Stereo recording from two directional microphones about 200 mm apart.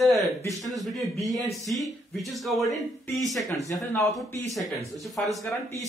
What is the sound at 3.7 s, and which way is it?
Speech, 15° left (ahead or behind).